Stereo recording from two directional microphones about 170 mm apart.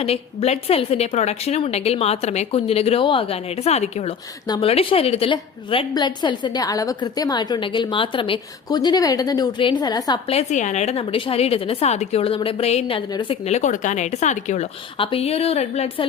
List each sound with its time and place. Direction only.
0.0 s a woman's voice: 40° left (ahead or behind)
4.4 s a woman's voice: 25° left (ahead or behind)
4.7 s a woman's voice: 35° left (ahead or behind)
10.3 s a woman's voice: 45° left (ahead or behind)
14.9 s a woman's voice: 30° left (ahead or behind)